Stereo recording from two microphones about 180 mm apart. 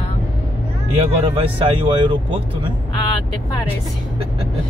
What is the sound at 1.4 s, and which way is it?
Speech, 30° right (ahead or behind).